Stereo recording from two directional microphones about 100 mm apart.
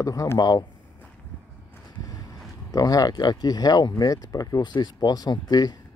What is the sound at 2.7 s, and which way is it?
Speech, 40° left (ahead or behind).